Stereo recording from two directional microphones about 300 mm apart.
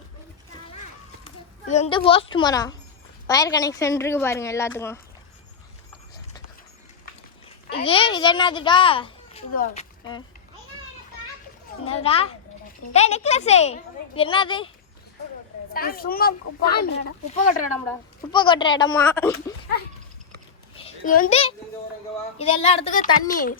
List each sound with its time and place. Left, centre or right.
1.7 s a woman's voice: centre
7.9 s a woman's voice: centre
11.9 s speech: centre
15.7 s speech: left
18.3 s a woman's voice: centre
20.7 s a child's voice: left